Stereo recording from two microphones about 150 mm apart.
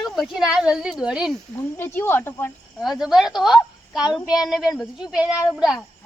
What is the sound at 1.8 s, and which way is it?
Speech, 15° left (ahead or behind).